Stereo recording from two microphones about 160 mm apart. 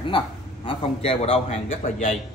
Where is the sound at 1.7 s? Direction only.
60° left (ahead or behind).